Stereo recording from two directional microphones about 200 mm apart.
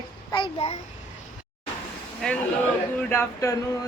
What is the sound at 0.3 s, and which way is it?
Speech, 25° left (ahead or behind).